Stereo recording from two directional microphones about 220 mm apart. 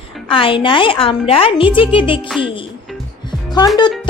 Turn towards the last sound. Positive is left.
turn(degrees=20)  # may be behind; listen again after turning